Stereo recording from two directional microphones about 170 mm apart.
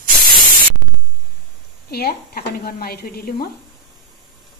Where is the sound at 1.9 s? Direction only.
65° left (ahead or behind).